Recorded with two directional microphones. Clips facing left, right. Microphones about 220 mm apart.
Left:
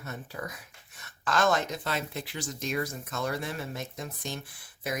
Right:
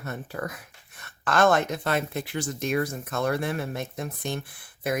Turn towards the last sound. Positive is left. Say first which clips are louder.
# right 6 dB
turn(degrees=-60)  # may be behind; listen again after turning